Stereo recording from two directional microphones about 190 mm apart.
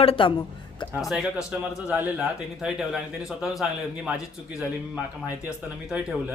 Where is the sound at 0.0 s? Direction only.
30° left (ahead or behind).